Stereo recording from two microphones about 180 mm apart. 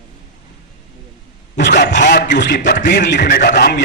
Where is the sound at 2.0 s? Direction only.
75° left (ahead or behind).